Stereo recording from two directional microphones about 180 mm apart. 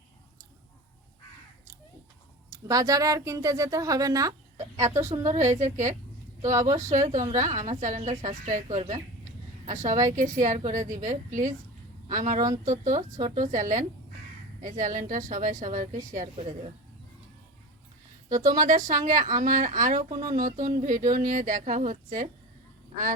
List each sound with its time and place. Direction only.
2.5 s speech: 20° right (ahead or behind)
5.1 s a woman's voice: 35° right (ahead or behind)
6.4 s speech: 15° right (ahead or behind)
6.7 s a woman's voice: 40° right (ahead or behind)
18.3 s speech: 20° right (ahead or behind)
18.9 s speech: 45° right (ahead or behind)
20.0 s speech: 25° right (ahead or behind)
20.3 s speech: 45° right (ahead or behind)